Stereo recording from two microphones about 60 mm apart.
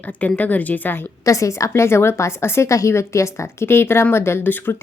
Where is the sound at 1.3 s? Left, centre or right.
Left.